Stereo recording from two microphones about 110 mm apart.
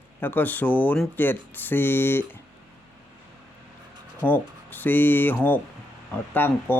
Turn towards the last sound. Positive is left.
turn(degrees=20)  # may be behind; listen again after turning